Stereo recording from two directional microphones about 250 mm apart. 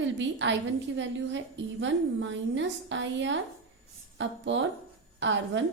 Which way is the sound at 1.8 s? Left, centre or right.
Right.